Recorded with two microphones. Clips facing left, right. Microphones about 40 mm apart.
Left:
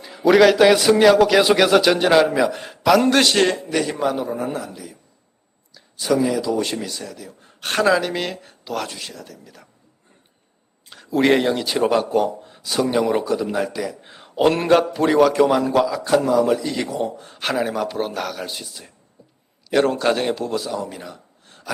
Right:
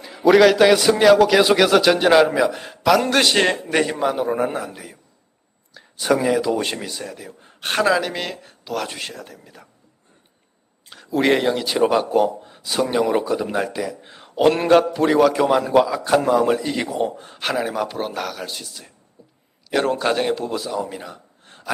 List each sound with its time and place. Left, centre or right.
0.0 s a man's voice: centre
3.5 s speech: right
6.7 s speech: centre
7.1 s speech: right
7.7 s a man's voice: centre
8.9 s speech: right
10.8 s a man's voice: centre
13.4 s speech: centre
13.8 s a man's voice: centre
16.0 s speech: right
16.5 s a man's voice: centre
17.4 s a man's voice: centre